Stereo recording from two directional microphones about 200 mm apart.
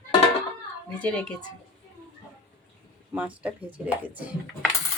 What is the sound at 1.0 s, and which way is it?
Speech, 5° left (ahead or behind).